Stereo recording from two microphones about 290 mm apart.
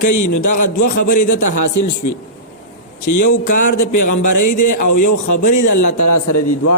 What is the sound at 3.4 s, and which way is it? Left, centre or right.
Speech, left.